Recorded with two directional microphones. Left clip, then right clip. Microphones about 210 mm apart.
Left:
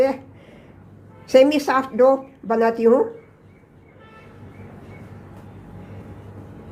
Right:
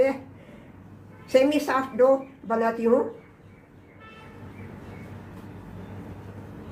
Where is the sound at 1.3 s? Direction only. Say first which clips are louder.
Left 6 dB; 40° left (ahead or behind).